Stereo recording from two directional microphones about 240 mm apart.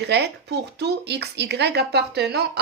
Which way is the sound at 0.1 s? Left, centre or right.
Right.